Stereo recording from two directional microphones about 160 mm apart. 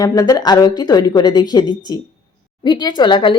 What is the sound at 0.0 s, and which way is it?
A woman's voice, 25° left (ahead or behind).